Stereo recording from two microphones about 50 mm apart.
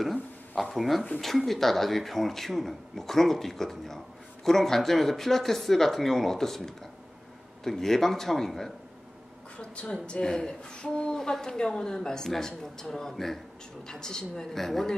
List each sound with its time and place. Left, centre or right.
0.0 s a woman's voice: centre
9.6 s a woman's voice: left; by 15.0 s centre